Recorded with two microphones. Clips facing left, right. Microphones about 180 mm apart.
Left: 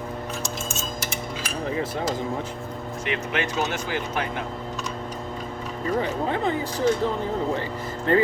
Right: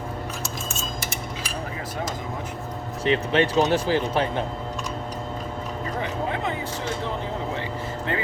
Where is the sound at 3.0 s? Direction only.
30° right (ahead or behind).